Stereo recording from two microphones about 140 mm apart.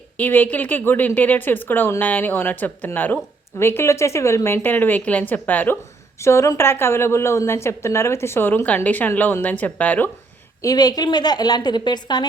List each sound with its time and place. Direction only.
0.2 s a woman's voice: 10° left (ahead or behind)
10.6 s a woman's voice: 25° left (ahead or behind)